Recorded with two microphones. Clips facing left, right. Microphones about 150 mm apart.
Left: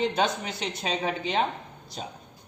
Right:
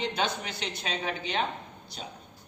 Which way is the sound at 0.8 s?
45° left (ahead or behind).